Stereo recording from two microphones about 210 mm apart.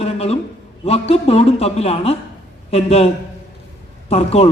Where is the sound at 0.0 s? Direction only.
30° left (ahead or behind).